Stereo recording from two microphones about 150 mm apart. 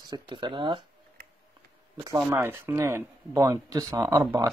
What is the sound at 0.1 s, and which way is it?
Speech, 30° right (ahead or behind).